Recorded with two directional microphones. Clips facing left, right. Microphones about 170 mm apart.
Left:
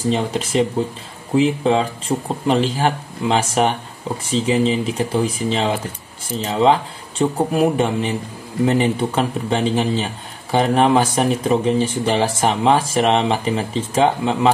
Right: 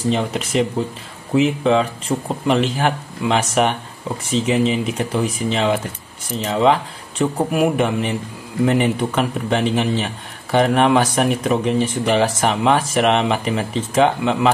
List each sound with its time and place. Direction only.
0.4 s speech: 30° left (ahead or behind)